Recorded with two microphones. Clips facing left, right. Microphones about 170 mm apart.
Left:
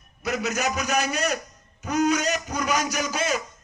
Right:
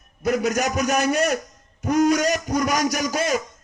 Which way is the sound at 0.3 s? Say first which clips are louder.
Right 5 dB; 50° right (ahead or behind).